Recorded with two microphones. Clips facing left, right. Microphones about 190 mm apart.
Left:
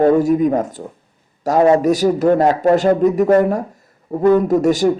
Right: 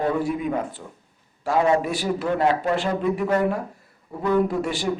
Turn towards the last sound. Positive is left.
turn(degrees=40)  # may be behind; listen again after turning